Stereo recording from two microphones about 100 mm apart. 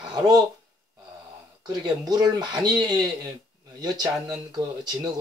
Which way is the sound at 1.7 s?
40° right (ahead or behind).